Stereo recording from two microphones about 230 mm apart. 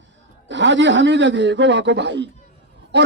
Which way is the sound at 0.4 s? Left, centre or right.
Right.